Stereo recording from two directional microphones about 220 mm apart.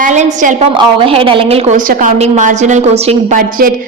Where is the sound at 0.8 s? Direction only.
25° right (ahead or behind).